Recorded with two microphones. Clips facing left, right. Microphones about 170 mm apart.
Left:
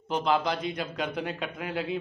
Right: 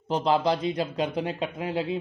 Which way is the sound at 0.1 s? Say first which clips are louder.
Right 3 dB; 35° right (ahead or behind).